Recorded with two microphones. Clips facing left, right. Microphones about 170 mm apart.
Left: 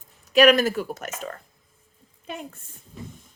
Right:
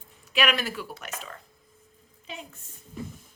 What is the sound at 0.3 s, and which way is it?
A woman's voice, 45° left (ahead or behind).